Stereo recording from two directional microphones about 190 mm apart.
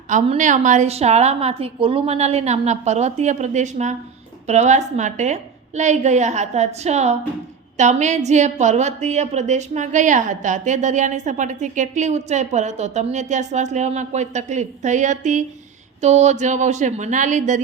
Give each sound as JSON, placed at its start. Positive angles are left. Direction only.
{"t": 0.1, "sound": "a woman's voice", "side_deg": -40}